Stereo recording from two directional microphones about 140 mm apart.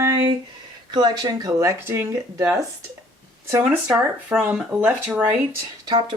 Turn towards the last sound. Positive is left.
turn(degrees=-30)  # may be behind; listen again after turning